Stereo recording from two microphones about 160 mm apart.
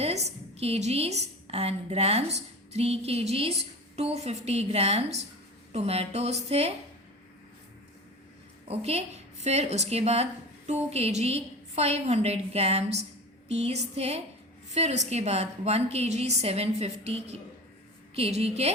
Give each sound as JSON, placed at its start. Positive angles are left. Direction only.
{"t": 0.0, "sound": "a woman's voice", "side_deg": -40}
{"t": 8.6, "sound": "a woman's voice", "side_deg": -40}